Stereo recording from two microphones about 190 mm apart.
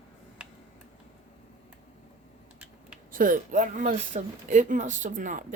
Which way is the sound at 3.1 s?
45° right (ahead or behind).